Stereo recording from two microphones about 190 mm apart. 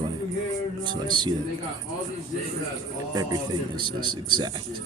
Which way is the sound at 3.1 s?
20° right (ahead or behind).